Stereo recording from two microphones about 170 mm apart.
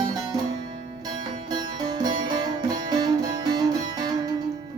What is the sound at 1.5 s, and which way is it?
Music, 25° right (ahead or behind).